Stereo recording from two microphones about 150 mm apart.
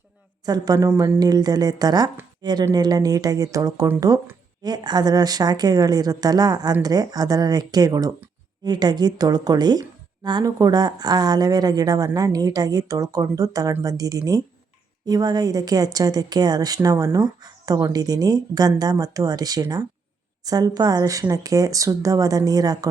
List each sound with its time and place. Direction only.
0.4 s speech: 25° right (ahead or behind)